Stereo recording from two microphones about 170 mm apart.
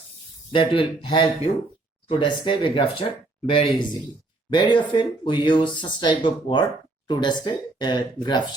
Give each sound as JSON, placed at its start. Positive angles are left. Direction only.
{"t": 0.5, "sound": "speech", "side_deg": 30}